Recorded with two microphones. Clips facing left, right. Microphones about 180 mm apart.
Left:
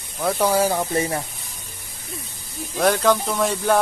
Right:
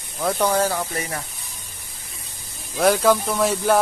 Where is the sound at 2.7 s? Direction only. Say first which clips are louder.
Right 1 dB; centre (ahead or behind).